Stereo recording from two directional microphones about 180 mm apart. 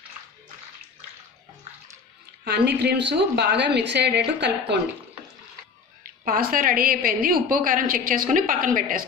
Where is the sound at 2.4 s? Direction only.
65° right (ahead or behind).